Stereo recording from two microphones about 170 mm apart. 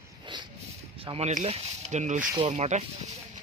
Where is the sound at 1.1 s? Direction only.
40° right (ahead or behind).